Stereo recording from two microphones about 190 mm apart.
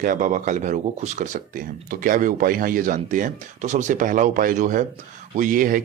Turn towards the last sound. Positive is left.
turn(degrees=-45)  # may be behind; listen again after turning